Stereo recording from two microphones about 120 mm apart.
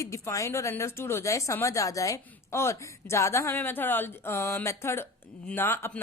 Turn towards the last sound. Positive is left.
turn(degrees=20)  # may be behind; listen again after turning